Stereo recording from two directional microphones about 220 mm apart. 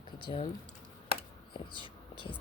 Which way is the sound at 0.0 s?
25° left (ahead or behind).